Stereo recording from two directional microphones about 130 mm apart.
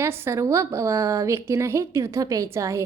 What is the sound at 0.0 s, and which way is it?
A woman's voice, 20° right (ahead or behind).